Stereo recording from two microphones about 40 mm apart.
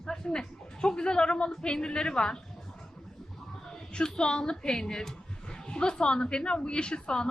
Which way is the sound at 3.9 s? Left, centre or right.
Left.